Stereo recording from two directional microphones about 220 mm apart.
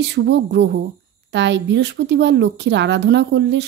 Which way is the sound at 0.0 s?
50° right (ahead or behind).